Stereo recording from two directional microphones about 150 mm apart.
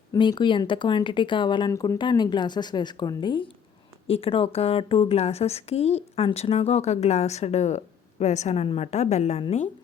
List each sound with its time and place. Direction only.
0.1 s a woman's voice: 30° left (ahead or behind); by 9.4 s 50° left (ahead or behind)